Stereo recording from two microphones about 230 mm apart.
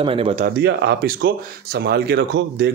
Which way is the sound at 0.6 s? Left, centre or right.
Right.